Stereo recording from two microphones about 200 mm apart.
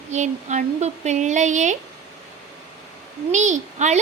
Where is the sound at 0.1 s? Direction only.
35° right (ahead or behind).